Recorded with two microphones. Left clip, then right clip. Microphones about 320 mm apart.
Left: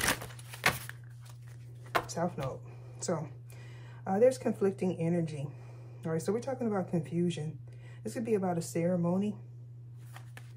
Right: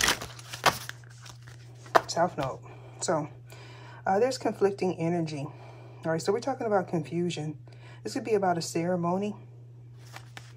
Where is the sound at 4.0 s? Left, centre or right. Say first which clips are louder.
Right 1 dB; right.